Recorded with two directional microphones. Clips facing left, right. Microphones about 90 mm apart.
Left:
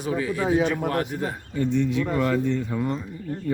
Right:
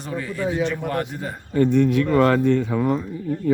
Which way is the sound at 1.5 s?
60° right (ahead or behind).